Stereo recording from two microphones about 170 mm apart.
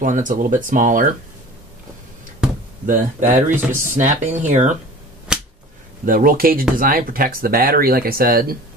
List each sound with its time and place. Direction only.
0.0 s speech: 50° right (ahead or behind)
2.9 s speech: 50° right (ahead or behind)
5.3 s a sound: 5° right (ahead or behind)
6.0 s speech: 55° right (ahead or behind)